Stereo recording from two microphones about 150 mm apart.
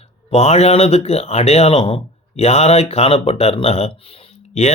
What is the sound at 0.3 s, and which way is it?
Speech, 45° left (ahead or behind).